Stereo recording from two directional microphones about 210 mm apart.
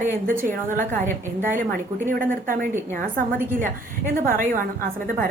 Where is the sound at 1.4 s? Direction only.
40° right (ahead or behind).